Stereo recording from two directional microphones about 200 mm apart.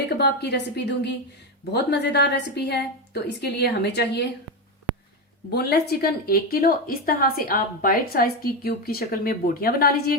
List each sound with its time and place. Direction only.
0.2 s a woman's voice: 55° left (ahead or behind)
5.5 s a woman's voice: 50° left (ahead or behind)